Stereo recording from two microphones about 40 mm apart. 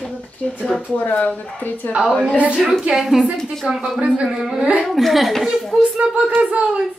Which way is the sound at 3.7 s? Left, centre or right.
Right.